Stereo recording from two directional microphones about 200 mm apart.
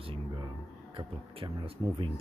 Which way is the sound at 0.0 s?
25° right (ahead or behind).